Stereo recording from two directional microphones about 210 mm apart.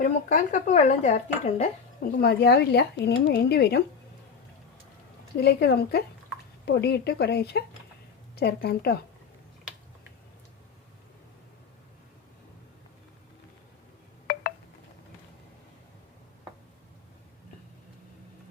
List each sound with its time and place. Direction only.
0.0 s speech: 40° left (ahead or behind)
2.0 s speech: 50° left (ahead or behind)
5.4 s speech: 50° left (ahead or behind)